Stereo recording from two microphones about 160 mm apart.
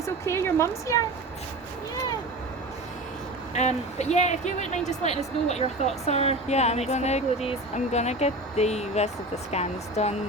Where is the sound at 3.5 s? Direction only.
45° left (ahead or behind).